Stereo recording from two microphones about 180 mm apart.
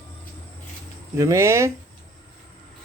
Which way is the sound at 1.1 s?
15° right (ahead or behind).